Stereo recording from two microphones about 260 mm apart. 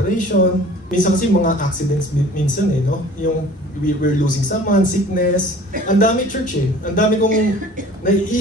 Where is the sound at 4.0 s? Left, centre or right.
Left.